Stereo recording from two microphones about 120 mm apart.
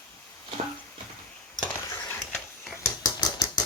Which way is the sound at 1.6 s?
30° left (ahead or behind).